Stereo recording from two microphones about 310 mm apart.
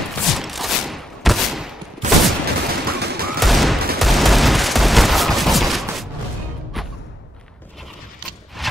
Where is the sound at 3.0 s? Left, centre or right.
Right.